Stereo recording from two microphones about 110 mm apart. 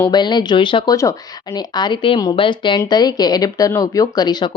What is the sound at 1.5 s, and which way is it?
Speech, 40° left (ahead or behind).